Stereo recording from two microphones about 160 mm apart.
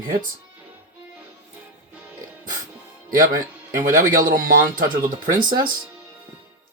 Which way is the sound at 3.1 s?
60° right (ahead or behind).